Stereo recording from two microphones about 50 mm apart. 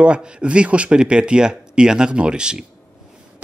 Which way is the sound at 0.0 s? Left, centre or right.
Right.